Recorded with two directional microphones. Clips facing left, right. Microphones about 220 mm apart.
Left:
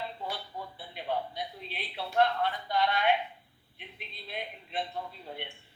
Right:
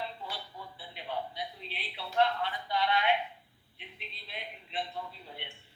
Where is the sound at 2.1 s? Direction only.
45° left (ahead or behind).